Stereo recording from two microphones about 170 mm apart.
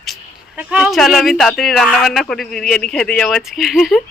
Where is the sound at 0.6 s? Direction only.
5° right (ahead or behind).